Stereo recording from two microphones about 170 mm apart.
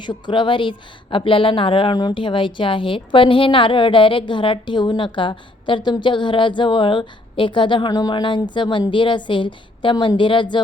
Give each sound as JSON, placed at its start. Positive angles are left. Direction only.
{"t": 0.0, "sound": "a woman's voice", "side_deg": 25}